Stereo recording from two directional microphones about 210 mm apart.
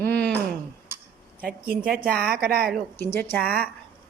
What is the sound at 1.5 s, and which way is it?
A woman's voice, 45° right (ahead or behind).